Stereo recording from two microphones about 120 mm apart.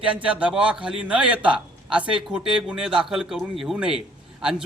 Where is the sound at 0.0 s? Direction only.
10° right (ahead or behind).